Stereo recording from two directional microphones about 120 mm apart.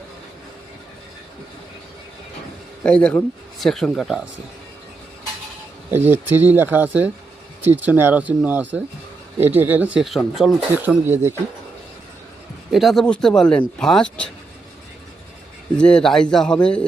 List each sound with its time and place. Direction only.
2.8 s a man's voice: 10° left (ahead or behind)
6.1 s speech: 15° right (ahead or behind)
10.8 s speech: 20° right (ahead or behind)
12.7 s speech: centre (ahead or behind)
15.8 s a man's voice: 5° left (ahead or behind)